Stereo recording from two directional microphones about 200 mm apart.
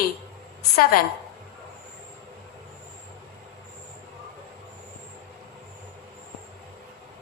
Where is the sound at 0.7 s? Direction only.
45° left (ahead or behind).